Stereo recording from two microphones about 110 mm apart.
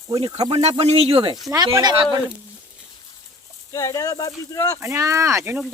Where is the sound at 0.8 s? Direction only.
65° right (ahead or behind).